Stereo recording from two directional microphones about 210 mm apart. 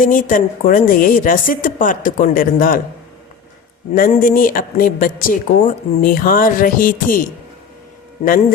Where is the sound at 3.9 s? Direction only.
40° left (ahead or behind).